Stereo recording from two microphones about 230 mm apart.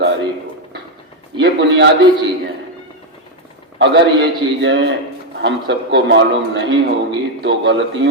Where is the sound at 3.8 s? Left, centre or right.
Right.